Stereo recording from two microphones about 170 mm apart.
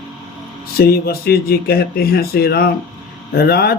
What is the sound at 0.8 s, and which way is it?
Speech, 65° left (ahead or behind).